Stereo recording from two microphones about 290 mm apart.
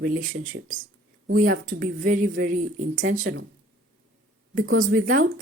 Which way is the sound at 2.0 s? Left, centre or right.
Right.